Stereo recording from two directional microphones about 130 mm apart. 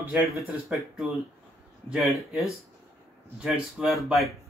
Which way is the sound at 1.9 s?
Centre (ahead or behind).